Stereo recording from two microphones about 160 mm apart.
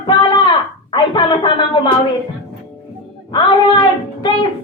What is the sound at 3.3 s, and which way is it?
Speech, 30° left (ahead or behind).